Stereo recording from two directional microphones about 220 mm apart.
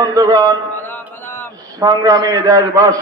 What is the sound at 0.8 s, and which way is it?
Mantra, 10° left (ahead or behind).